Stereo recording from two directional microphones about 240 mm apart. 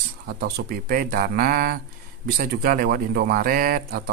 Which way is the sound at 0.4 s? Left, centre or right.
Right.